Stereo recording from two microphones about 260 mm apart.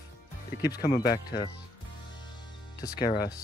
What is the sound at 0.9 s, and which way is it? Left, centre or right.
Speech, left.